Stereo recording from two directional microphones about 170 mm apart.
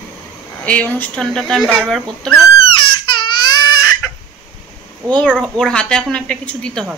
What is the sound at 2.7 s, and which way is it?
Baby cry, 30° left (ahead or behind).